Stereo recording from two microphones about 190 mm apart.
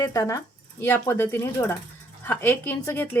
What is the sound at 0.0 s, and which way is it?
Speech, 15° left (ahead or behind).